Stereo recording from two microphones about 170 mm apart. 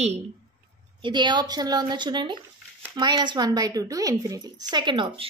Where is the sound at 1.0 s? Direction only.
25° right (ahead or behind).